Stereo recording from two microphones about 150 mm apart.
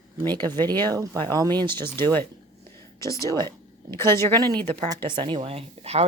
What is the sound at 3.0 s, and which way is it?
Speech, 20° left (ahead or behind).